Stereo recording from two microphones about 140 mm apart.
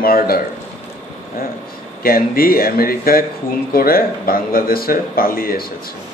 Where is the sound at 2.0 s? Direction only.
90° left.